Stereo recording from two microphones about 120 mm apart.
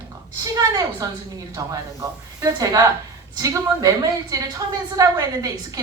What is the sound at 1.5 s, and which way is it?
A woman's voice, 30° right (ahead or behind).